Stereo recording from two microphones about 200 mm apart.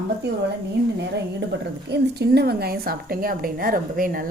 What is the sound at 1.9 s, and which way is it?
A woman's voice, 55° right (ahead or behind).